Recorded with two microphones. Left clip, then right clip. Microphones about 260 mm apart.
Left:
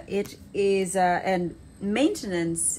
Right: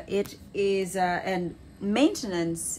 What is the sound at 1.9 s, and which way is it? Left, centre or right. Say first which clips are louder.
Speech: even; centre.